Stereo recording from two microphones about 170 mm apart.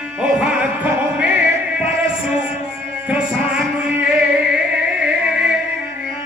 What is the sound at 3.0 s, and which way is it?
Music, 5° right (ahead or behind).